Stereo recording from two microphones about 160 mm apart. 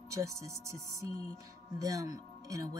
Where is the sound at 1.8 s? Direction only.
20° right (ahead or behind).